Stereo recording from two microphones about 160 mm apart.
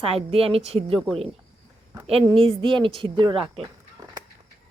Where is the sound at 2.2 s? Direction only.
35° right (ahead or behind).